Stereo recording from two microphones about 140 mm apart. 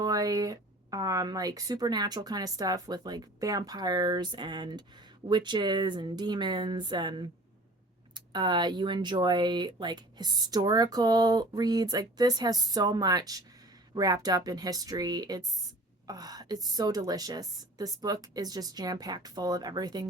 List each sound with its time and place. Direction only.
0.0 s speech: 25° right (ahead or behind)